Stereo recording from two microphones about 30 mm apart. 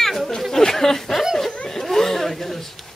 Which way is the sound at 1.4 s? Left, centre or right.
Centre.